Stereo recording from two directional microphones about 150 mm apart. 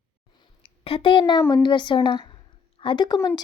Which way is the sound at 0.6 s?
40° left (ahead or behind).